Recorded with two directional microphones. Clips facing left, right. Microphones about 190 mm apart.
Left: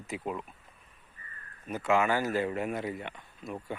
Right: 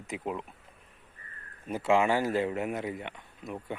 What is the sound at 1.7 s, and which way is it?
Speech, 30° right (ahead or behind).